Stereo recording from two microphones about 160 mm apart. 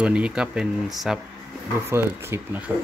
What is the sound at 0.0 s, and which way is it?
Speech, 5° right (ahead or behind).